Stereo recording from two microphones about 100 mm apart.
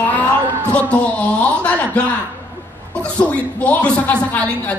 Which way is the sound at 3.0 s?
15° left (ahead or behind).